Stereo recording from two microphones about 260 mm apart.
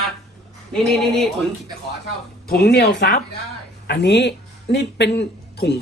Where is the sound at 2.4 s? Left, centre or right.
Left.